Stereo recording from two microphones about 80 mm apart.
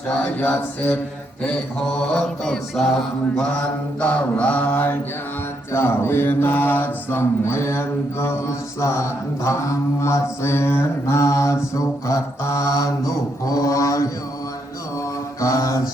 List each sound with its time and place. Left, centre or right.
0.3 s mantra: centre
2.0 s mantra: centre
4.0 s mantra: centre; by 14.1 s left
15.4 s mantra: left